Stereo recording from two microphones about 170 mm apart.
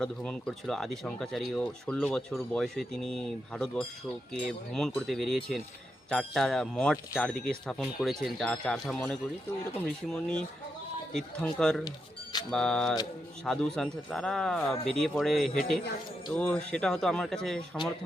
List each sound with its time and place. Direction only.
0.0 s speech: 5° left (ahead or behind)
11.9 s speech: 25° left (ahead or behind)
12.5 s speech: 5° left (ahead or behind)